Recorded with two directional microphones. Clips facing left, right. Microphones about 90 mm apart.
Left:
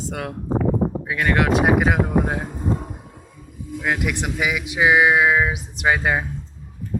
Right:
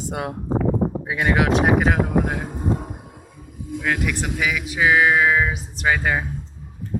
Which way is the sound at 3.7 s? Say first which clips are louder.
Even; 15° left (ahead or behind).